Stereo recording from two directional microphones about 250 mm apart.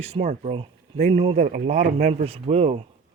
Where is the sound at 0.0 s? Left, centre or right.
Right.